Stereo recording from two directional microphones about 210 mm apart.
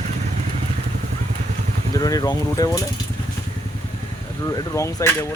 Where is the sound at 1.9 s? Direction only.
15° left (ahead or behind).